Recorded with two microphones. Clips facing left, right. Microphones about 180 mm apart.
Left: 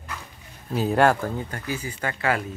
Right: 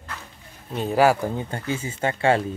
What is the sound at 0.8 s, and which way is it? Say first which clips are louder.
Speech: right 1 dB; centre (ahead or behind).